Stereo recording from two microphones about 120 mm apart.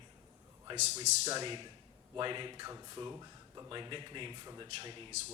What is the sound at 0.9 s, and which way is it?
Speech, 60° right (ahead or behind).